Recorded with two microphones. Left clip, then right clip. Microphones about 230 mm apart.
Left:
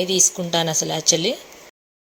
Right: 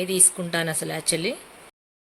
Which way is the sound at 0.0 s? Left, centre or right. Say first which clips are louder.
Left 6 dB; centre.